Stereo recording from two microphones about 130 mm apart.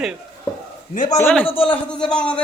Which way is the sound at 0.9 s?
80° left.